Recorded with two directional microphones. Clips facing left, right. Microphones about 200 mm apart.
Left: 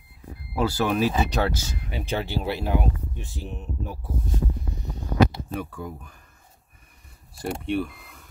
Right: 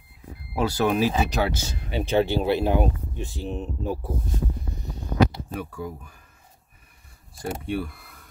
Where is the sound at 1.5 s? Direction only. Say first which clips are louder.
Right 3 dB; 30° right (ahead or behind).